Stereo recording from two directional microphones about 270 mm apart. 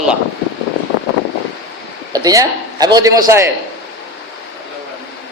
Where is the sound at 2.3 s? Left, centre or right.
Centre.